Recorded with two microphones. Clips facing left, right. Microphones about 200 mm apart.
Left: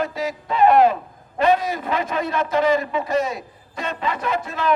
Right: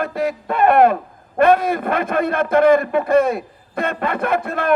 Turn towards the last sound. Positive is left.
turn(degrees=-55)  # may be behind; listen again after turning